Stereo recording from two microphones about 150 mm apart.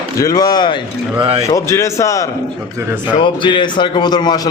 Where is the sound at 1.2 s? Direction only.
40° right (ahead or behind).